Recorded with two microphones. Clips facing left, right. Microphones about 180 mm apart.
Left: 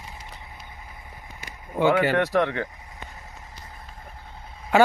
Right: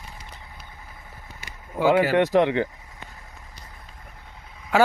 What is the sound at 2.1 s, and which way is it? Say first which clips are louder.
Speech: right 3 dB; 20° right (ahead or behind).